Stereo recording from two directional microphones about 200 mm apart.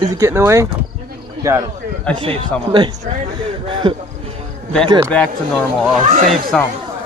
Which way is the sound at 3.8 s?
25° right (ahead or behind).